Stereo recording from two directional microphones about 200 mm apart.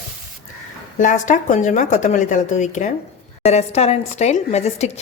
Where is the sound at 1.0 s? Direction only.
40° left (ahead or behind).